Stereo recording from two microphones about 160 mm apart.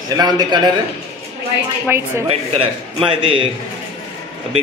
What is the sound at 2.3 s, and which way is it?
A man's voice, 35° right (ahead or behind).